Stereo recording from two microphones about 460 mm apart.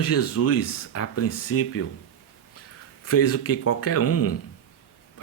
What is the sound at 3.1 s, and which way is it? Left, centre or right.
Speech, left.